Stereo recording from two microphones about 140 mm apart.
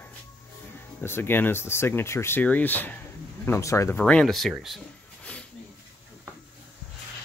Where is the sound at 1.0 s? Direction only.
15° left (ahead or behind); by 4.8 s centre (ahead or behind).